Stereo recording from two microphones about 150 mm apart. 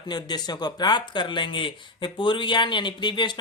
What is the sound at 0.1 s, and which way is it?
Speech, 30° left (ahead or behind).